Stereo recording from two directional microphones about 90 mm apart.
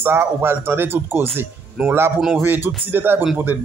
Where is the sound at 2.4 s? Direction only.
20° right (ahead or behind).